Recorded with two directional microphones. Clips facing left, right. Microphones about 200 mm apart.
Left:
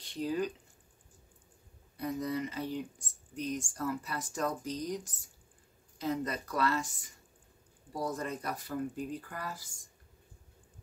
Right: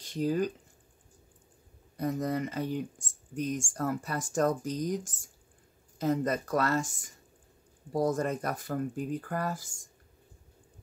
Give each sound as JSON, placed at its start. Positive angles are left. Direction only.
{"t": 0.0, "sound": "speech", "side_deg": -45}
{"t": 2.0, "sound": "speech", "side_deg": -45}